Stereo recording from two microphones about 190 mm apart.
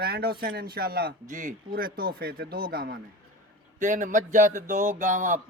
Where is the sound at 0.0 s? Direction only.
55° right (ahead or behind).